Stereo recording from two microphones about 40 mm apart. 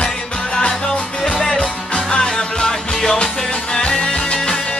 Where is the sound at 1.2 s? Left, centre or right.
Centre.